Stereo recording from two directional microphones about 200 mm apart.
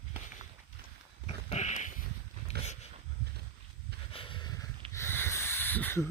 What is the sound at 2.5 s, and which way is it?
Dog, 55° right (ahead or behind).